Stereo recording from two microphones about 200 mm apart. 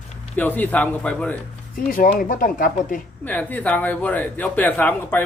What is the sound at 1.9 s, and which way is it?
Speech, 45° left (ahead or behind).